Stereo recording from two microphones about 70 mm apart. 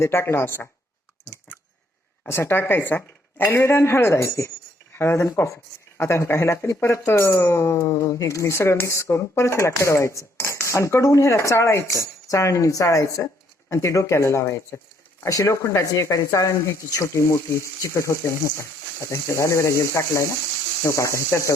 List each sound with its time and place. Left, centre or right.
0.0 s speech: left
2.2 s speech: left